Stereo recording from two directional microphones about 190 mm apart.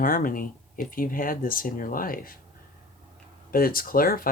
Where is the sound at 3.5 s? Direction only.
50° left (ahead or behind).